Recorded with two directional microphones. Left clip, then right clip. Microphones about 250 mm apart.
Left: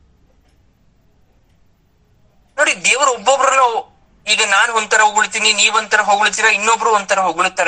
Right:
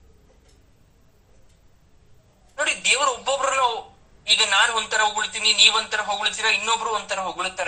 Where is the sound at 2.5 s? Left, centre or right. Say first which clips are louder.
Left 7 dB; left.